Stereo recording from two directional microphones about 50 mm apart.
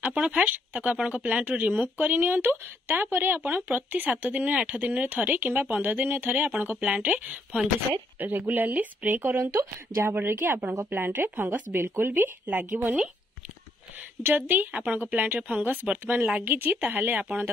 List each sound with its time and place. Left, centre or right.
0.0 s speech: right
0.5 s speech: right
9.5 s a woman's voice: right
10.1 s speech: right
14.2 s speech: right
14.7 s speech: right